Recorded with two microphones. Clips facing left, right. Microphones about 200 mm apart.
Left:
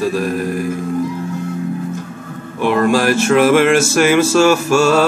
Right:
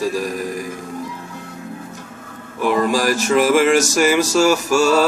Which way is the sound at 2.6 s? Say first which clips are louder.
Left 3 dB; 65° left (ahead or behind).